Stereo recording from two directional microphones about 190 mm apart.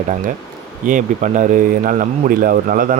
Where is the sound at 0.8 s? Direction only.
45° right (ahead or behind).